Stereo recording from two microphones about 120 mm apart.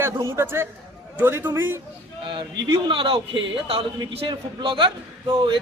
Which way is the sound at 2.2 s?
45° right (ahead or behind).